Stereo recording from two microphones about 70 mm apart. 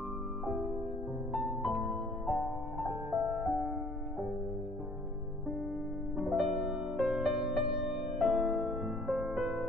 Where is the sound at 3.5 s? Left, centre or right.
Centre.